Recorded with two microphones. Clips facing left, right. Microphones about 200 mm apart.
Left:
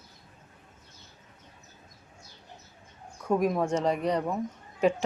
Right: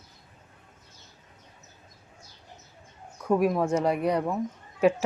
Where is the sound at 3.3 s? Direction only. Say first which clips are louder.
Right 2 dB; 5° right (ahead or behind).